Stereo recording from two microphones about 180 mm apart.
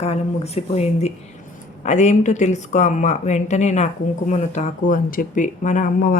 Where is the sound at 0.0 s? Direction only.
35° left (ahead or behind).